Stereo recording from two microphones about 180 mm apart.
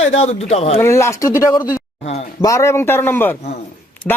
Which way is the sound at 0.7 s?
15° left (ahead or behind).